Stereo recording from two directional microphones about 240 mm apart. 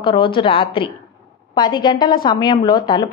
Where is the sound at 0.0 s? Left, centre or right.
Left.